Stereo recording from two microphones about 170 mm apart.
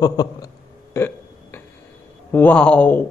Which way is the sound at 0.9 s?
15° left (ahead or behind).